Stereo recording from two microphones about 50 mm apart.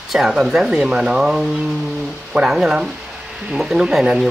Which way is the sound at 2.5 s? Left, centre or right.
Centre.